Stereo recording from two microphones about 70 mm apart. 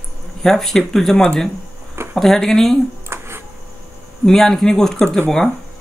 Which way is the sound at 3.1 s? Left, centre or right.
Right.